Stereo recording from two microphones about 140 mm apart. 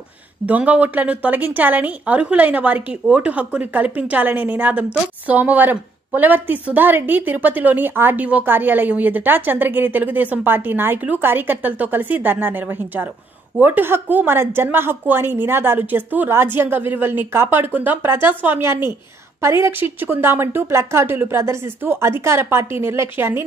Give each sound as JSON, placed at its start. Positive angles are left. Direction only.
{"t": 0.5, "sound": "a woman's voice", "side_deg": -10}